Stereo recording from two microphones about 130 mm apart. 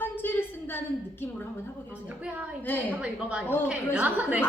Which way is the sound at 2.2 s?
10° right (ahead or behind).